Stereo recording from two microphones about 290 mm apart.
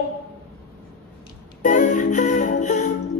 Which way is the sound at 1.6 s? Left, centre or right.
Left.